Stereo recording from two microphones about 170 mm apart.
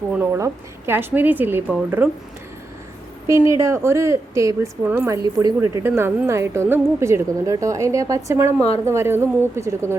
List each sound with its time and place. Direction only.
0.1 s a woman's voice: 15° right (ahead or behind)
3.2 s a woman's voice: 15° right (ahead or behind)